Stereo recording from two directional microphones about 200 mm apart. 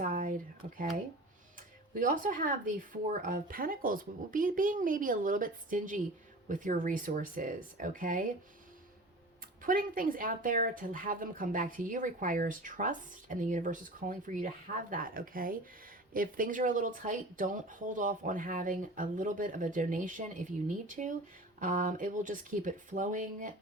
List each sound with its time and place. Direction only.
0.0 s a sound: 45° right (ahead or behind)
0.6 s speech: 35° right (ahead or behind)
2.0 s a woman's voice: 40° right (ahead or behind)
9.6 s a woman's voice: 45° right (ahead or behind)